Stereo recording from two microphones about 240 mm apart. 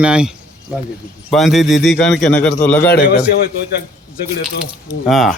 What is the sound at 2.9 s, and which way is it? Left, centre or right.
Speech, left.